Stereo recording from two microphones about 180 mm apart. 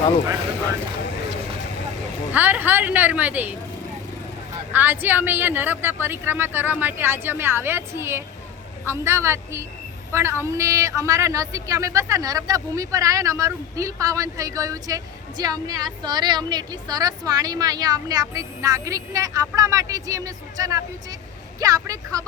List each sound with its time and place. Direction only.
2.3 s speech: 10° right (ahead or behind)
4.7 s speech: 10° right (ahead or behind)